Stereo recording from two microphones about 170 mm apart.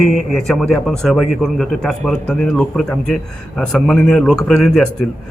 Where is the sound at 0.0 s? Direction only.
Centre (ahead or behind).